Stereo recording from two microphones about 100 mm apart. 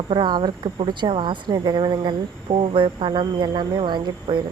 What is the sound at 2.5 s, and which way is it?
Speech, 65° right (ahead or behind).